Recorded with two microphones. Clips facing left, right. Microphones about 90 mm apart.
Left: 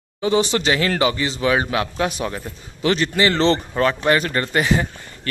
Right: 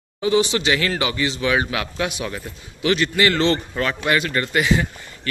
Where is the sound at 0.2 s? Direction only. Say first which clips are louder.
Even; 40° left (ahead or behind).